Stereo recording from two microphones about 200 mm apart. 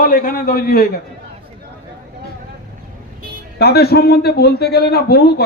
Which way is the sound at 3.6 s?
50° left (ahead or behind).